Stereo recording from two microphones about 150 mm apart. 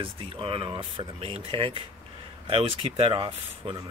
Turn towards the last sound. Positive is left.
turn(degrees=-35)  # may be behind; listen again after turning